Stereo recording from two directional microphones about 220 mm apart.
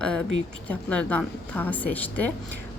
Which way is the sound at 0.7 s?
5° left (ahead or behind).